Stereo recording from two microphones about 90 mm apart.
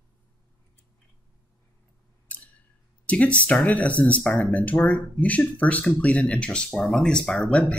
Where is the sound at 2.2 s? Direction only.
15° left (ahead or behind).